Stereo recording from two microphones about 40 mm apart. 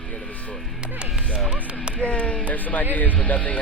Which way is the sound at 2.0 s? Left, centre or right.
Left.